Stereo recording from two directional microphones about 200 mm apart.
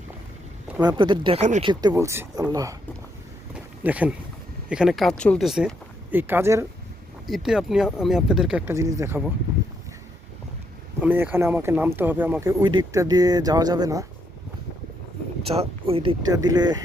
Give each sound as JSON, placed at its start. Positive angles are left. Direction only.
{"t": 0.8, "sound": "speech", "side_deg": -20}
{"t": 1.6, "sound": "speech", "side_deg": -20}
{"t": 3.5, "sound": "a sound", "side_deg": -5}
{"t": 4.7, "sound": "speech", "side_deg": 0}
{"t": 7.3, "sound": "speech", "side_deg": 0}
{"t": 11.0, "sound": "speech", "side_deg": -10}
{"t": 15.5, "sound": "speech", "side_deg": -30}